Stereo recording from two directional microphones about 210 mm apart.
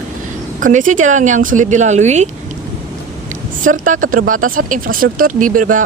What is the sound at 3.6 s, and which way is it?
Speech, 40° right (ahead or behind).